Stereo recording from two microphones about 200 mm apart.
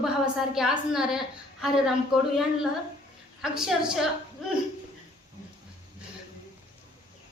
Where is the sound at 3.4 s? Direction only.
5° right (ahead or behind).